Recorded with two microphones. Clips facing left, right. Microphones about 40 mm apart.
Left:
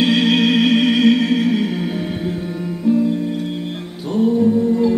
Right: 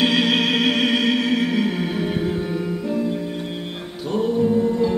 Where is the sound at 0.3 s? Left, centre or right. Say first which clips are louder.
Left 4 dB; right.